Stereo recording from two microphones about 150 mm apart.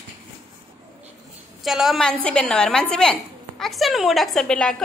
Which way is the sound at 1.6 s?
Centre (ahead or behind).